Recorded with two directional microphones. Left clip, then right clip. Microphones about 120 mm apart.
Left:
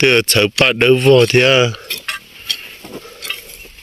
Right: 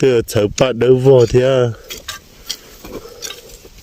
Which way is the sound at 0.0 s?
30° right (ahead or behind).